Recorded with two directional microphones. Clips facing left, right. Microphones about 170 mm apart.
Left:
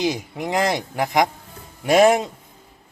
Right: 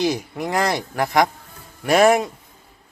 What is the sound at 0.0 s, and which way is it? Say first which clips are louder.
Speech: right 1 dB; 15° left (ahead or behind).